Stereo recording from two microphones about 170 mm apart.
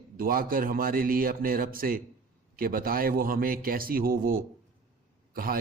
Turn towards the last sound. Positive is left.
turn(degrees=-60)  # may be behind; listen again after turning